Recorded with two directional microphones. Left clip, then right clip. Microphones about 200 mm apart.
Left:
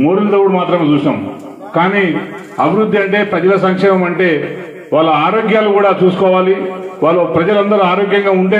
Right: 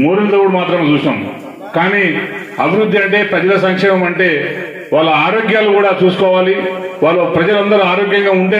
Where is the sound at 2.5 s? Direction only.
35° right (ahead or behind).